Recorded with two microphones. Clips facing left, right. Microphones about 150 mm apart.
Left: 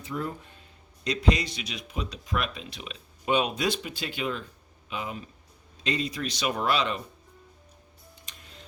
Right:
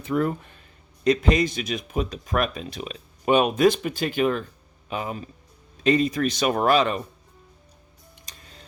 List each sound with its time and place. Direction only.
0.0 s speech: 65° right (ahead or behind)
1.0 s speech: 50° right (ahead or behind)